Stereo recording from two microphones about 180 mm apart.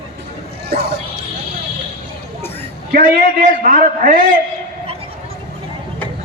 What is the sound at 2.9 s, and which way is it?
A man's voice, 45° right (ahead or behind).